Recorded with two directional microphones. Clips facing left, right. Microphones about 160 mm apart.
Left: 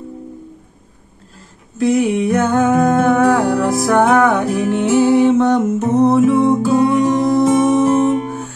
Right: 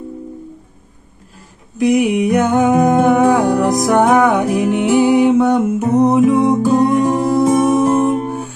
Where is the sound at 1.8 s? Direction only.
15° right (ahead or behind).